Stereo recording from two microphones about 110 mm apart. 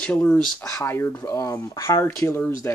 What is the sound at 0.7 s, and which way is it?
Speech, 20° left (ahead or behind).